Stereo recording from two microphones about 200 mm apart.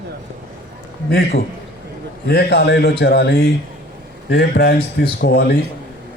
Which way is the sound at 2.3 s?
55° left (ahead or behind).